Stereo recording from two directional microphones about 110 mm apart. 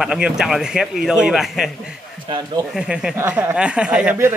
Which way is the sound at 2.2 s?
45° right (ahead or behind).